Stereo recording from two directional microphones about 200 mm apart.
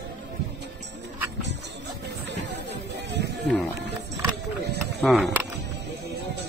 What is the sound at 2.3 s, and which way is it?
Music, 60° right (ahead or behind).